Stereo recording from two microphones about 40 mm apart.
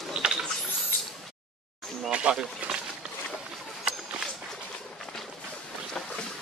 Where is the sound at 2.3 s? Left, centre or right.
Right.